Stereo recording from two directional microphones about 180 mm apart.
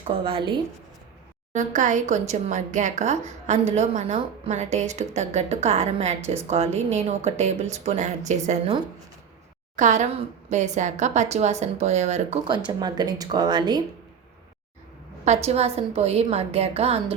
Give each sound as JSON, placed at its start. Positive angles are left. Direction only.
{"t": 0.1, "sound": "speech", "side_deg": -30}
{"t": 1.5, "sound": "speech", "side_deg": -45}
{"t": 9.7, "sound": "a woman's voice", "side_deg": -40}
{"t": 12.5, "sound": "speech", "side_deg": -25}
{"t": 15.2, "sound": "speech", "side_deg": -35}